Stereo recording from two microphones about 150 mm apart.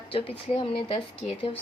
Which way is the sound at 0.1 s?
40° left (ahead or behind).